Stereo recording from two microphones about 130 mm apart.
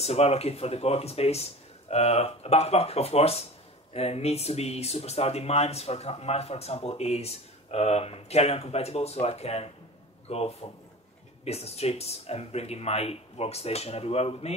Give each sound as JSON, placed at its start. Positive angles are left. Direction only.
{"t": 0.0, "sound": "a man's voice", "side_deg": 55}